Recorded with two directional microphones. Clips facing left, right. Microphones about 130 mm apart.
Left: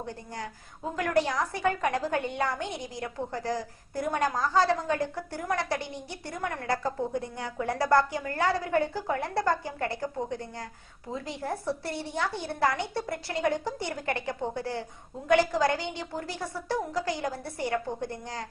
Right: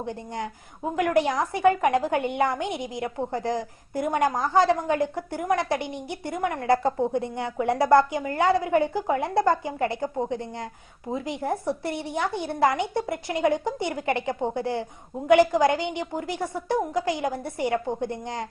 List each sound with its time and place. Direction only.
0.0 s a woman's voice: 20° right (ahead or behind)